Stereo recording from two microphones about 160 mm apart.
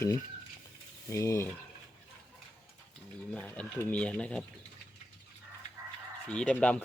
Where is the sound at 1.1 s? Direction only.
20° left (ahead or behind).